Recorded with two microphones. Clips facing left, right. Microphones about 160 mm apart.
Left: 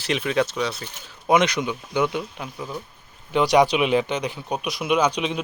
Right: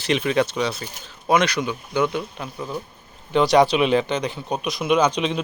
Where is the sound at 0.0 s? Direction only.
Centre (ahead or behind).